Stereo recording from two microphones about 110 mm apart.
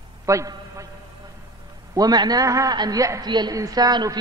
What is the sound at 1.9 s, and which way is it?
A man's voice, 35° right (ahead or behind).